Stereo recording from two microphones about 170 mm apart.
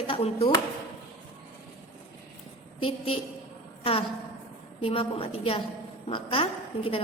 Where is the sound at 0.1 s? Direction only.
35° left (ahead or behind).